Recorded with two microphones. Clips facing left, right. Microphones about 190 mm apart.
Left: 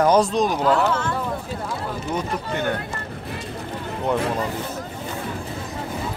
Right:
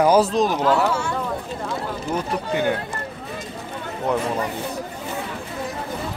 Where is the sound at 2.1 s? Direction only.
10° right (ahead or behind).